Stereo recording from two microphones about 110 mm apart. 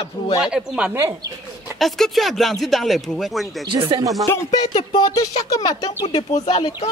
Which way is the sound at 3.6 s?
45° right (ahead or behind).